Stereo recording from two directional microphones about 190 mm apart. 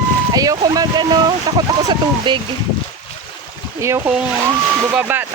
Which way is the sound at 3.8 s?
15° right (ahead or behind).